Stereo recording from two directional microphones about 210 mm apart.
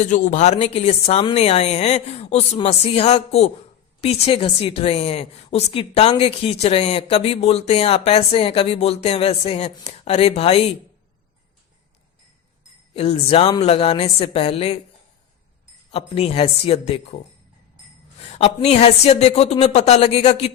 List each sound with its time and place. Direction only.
0.0 s a woman's voice: 35° left (ahead or behind)
13.0 s a woman's voice: 30° left (ahead or behind)
15.9 s a woman's voice: 25° left (ahead or behind)